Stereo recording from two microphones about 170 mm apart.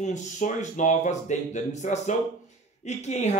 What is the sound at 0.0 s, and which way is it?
Speech, 45° left (ahead or behind).